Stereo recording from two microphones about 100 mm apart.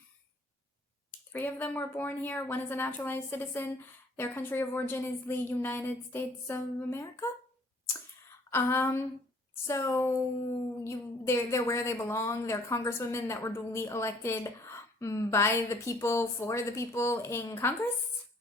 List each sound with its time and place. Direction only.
1.3 s a woman's voice: 20° left (ahead or behind)
8.4 s a woman's voice: 25° left (ahead or behind)